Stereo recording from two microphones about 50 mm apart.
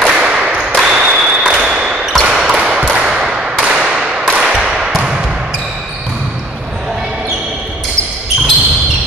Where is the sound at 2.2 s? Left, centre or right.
Centre.